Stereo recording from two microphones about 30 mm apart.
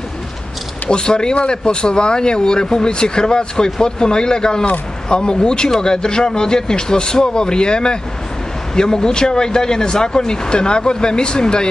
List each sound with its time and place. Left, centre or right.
0.8 s speech: left